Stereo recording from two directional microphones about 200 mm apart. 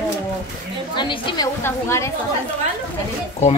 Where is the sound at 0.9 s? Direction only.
25° left (ahead or behind).